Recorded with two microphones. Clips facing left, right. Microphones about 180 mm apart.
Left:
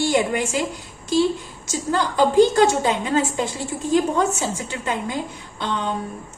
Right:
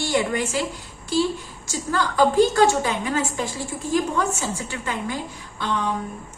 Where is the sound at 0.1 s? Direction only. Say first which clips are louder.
Left 2 dB; 20° left (ahead or behind).